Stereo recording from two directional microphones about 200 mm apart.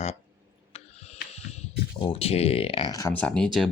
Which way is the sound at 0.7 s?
30° left (ahead or behind).